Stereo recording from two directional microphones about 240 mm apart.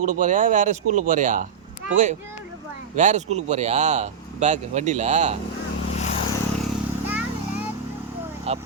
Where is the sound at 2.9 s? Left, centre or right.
Right.